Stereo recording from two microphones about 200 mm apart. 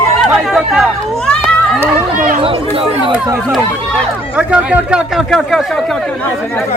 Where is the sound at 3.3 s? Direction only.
Centre (ahead or behind).